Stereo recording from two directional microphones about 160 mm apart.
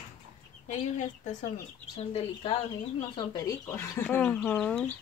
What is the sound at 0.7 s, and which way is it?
Speech, 45° left (ahead or behind).